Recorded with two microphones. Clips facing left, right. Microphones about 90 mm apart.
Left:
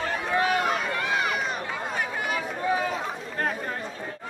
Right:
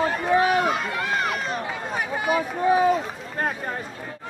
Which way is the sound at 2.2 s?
20° right (ahead or behind).